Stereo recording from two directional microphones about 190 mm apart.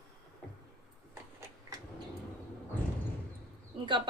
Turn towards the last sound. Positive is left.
turn(degrees=-25)  # may be behind; listen again after turning